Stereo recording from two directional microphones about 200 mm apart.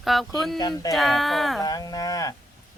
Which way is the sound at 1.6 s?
20° left (ahead or behind).